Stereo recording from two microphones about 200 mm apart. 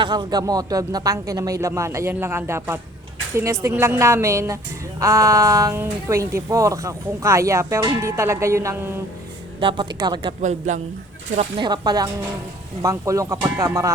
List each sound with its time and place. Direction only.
0.0 s speech: 20° right (ahead or behind)
9.6 s a woman's voice: 25° right (ahead or behind)
11.3 s a woman's voice: 25° right (ahead or behind)